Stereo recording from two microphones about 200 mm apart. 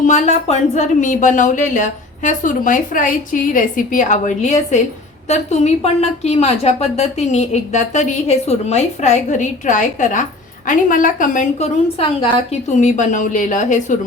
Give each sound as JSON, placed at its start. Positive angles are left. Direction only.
{"t": 0.0, "sound": "a woman's voice", "side_deg": 35}